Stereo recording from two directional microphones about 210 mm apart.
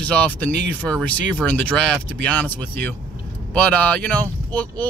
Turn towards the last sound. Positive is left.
turn(degrees=10)  # may be behind; listen again after turning